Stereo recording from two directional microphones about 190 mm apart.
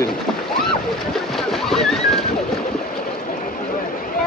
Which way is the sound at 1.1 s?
Centre (ahead or behind).